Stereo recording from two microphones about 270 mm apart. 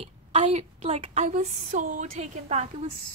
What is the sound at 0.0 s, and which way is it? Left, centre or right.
A woman's voice, right.